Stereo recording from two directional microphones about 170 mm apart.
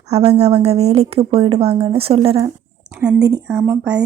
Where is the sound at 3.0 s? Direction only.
5° right (ahead or behind).